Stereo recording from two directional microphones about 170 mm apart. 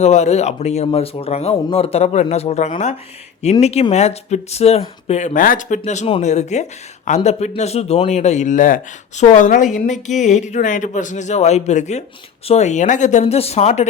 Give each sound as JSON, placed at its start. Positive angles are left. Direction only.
{"t": 0.0, "sound": "speech", "side_deg": 40}